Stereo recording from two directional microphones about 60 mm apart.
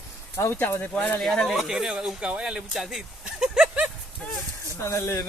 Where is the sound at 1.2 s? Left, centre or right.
Centre.